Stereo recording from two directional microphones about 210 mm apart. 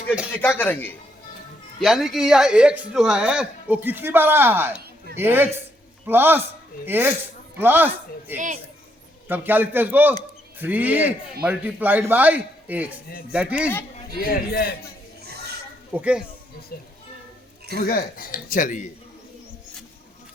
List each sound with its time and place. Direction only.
0.4 s a man's voice: 10° left (ahead or behind)
14.3 s a man's voice: 45° left (ahead or behind)
15.2 s a sound: 50° right (ahead or behind)
15.9 s speech: 5° right (ahead or behind)
17.7 s speech: 45° left (ahead or behind)